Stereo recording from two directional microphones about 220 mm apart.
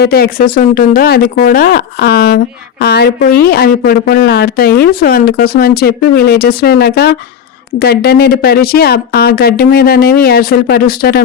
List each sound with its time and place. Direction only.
0.0 s speech: 45° left (ahead or behind)